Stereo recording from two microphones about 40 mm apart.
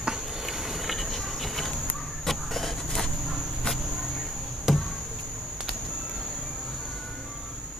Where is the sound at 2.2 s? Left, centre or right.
Centre.